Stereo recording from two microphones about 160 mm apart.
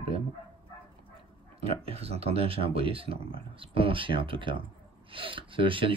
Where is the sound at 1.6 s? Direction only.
40° right (ahead or behind).